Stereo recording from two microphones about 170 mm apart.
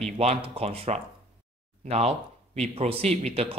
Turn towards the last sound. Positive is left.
turn(degrees=-35)  # may be behind; listen again after turning